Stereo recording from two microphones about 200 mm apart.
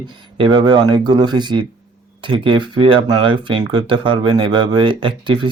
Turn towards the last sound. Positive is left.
turn(degrees=-25)  # may be behind; listen again after turning